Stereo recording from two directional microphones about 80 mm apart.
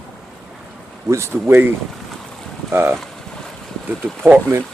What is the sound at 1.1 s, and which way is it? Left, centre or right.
Speech, right.